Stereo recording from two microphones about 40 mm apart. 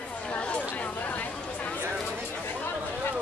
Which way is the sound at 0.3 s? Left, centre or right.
Left.